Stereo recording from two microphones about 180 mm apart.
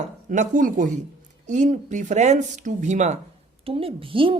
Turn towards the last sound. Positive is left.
turn(degrees=-30)  # may be behind; listen again after turning